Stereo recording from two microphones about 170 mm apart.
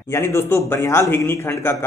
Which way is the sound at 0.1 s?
15° left (ahead or behind).